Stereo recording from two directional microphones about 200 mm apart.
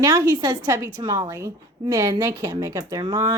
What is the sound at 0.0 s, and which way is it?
A woman's voice, 15° right (ahead or behind).